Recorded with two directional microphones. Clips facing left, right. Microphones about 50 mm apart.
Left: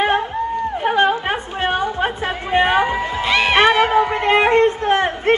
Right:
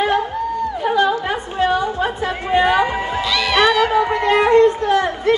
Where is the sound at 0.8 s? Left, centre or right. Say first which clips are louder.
Left 1 dB; left.